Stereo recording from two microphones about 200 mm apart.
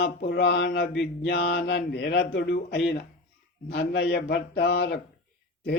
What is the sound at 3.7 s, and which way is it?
Mantra, 55° left (ahead or behind).